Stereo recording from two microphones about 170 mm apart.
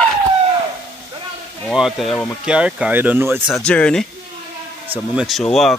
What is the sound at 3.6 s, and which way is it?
Speech, 5° left (ahead or behind).